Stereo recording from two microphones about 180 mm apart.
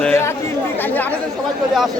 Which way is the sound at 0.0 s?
15° left (ahead or behind).